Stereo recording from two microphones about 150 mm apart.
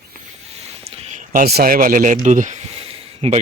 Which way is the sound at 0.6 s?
45° right (ahead or behind).